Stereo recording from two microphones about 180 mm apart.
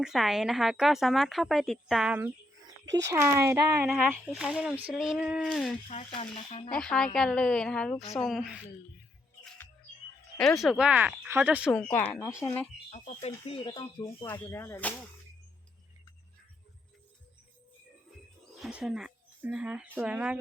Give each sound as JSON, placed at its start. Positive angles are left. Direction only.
{"t": 0.0, "sound": "speech", "side_deg": 0}
{"t": 3.8, "sound": "speech", "side_deg": -5}
{"t": 5.9, "sound": "speech", "side_deg": 35}
{"t": 6.7, "sound": "speech", "side_deg": 5}
{"t": 10.3, "sound": "speech", "side_deg": 0}
{"t": 12.4, "sound": "music", "side_deg": 10}
{"t": 13.2, "sound": "speech", "side_deg": 30}
{"t": 14.3, "sound": "music", "side_deg": 15}
{"t": 18.6, "sound": "speech", "side_deg": -5}